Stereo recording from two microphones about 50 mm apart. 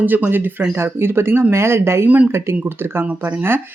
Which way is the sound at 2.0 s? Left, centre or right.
Right.